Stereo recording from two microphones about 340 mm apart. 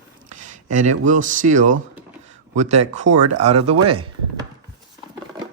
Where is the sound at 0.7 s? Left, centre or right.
Right.